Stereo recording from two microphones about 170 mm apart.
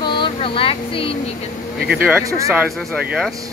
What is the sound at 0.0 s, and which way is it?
Vehicle, 30° left (ahead or behind).